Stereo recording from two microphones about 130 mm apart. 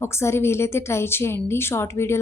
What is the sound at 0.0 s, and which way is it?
A woman's voice, 20° left (ahead or behind).